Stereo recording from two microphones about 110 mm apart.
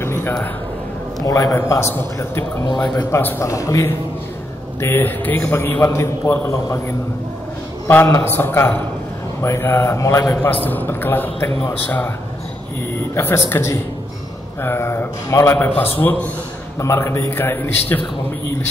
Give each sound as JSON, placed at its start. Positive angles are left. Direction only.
{"t": 0.0, "sound": "a sound", "side_deg": 20}
{"t": 1.2, "sound": "a man's voice", "side_deg": 30}
{"t": 7.9, "sound": "a man's voice", "side_deg": 20}
{"t": 10.3, "sound": "a man's voice", "side_deg": 15}
{"t": 13.1, "sound": "a man's voice", "side_deg": 20}